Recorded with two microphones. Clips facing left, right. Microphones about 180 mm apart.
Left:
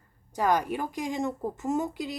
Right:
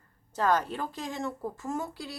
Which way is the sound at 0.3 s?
15° left (ahead or behind).